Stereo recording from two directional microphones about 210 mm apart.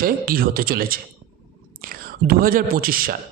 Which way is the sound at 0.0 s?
45° right (ahead or behind).